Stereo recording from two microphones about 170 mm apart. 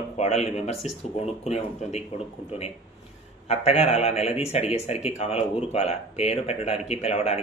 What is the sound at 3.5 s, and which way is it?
A man's voice, 40° left (ahead or behind).